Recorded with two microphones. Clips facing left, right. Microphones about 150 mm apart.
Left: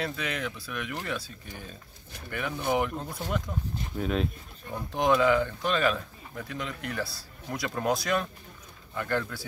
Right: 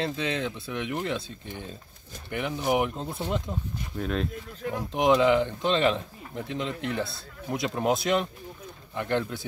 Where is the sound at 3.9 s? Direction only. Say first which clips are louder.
Left 1 dB; centre (ahead or behind).